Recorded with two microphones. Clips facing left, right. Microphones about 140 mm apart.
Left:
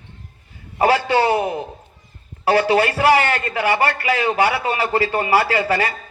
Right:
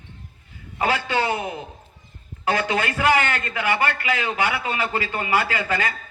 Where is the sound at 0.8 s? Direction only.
35° left (ahead or behind).